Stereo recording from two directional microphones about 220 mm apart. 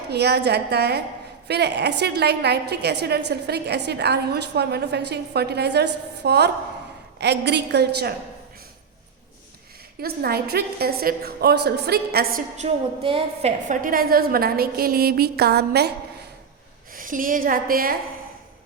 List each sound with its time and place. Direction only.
0.1 s a woman's voice: 50° right (ahead or behind)
10.0 s a woman's voice: 45° right (ahead or behind)
12.5 s a woman's voice: 25° right (ahead or behind)
13.7 s a woman's voice: 40° right (ahead or behind)
16.9 s a woman's voice: 40° right (ahead or behind)